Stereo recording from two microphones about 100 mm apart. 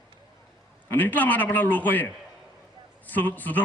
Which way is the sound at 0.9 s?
20° left (ahead or behind).